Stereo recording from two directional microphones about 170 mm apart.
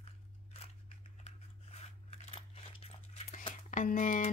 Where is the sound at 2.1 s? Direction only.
35° left (ahead or behind).